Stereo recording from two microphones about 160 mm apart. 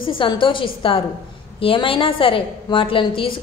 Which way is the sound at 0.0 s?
30° left (ahead or behind).